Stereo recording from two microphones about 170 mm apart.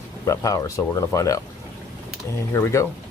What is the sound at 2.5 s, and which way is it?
Speech, 15° left (ahead or behind).